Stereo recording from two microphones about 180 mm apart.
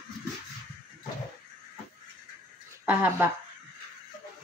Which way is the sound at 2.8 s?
10° right (ahead or behind).